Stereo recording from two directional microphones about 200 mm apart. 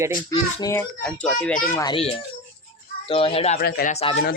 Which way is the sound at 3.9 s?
30° left (ahead or behind).